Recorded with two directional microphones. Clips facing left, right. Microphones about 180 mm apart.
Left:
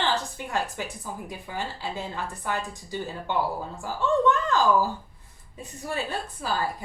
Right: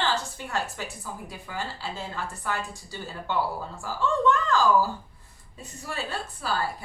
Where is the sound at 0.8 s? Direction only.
20° left (ahead or behind).